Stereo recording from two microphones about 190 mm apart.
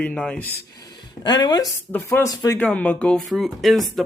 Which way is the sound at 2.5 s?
5° left (ahead or behind).